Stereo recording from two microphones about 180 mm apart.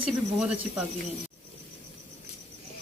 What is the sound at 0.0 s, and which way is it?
Speech, 5° right (ahead or behind).